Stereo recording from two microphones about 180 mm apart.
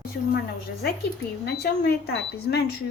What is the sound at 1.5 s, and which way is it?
Speech, 65° left (ahead or behind).